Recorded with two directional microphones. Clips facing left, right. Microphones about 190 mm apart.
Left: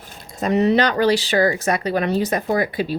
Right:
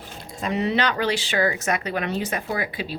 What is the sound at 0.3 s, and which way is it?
Speech, 40° left (ahead or behind).